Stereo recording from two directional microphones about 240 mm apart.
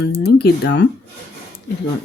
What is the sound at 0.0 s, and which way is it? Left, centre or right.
Speech, left.